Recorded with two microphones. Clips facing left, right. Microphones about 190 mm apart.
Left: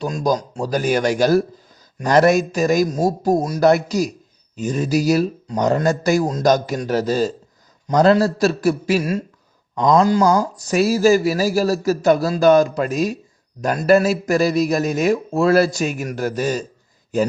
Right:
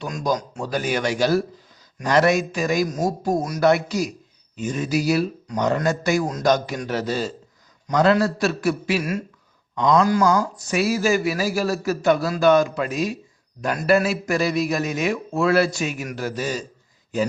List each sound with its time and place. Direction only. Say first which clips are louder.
0.0 s speech: left 4 dB; 35° left (ahead or behind)